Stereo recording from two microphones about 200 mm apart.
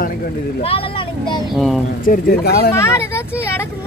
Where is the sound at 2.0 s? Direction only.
45° left (ahead or behind).